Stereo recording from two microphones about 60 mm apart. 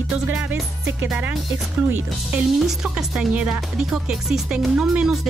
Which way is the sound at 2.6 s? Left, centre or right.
Centre.